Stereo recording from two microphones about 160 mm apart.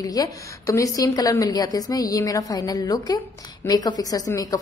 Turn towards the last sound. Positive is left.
turn(degrees=20)  # may be behind; listen again after turning